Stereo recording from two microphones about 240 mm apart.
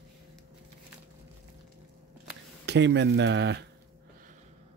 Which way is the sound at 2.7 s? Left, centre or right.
Right.